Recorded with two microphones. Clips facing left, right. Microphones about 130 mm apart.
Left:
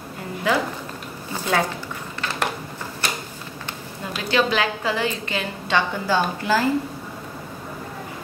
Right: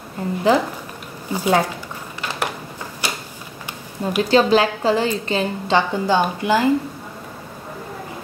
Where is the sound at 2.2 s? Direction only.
15° right (ahead or behind).